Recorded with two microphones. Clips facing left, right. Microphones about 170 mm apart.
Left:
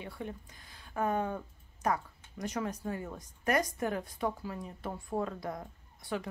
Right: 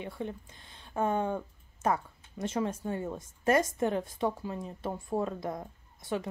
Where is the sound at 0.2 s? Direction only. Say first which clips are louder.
Right 4 dB; 25° right (ahead or behind).